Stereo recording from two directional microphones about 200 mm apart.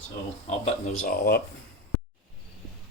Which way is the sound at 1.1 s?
50° left (ahead or behind).